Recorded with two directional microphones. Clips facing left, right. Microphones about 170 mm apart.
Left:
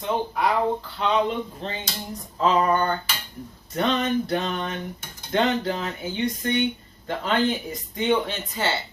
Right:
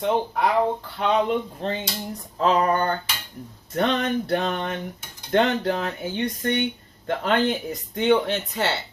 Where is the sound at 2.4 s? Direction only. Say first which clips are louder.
Even; 55° right (ahead or behind).